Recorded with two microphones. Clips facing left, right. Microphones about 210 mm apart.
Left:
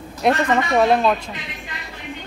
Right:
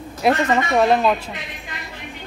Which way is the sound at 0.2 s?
5° right (ahead or behind).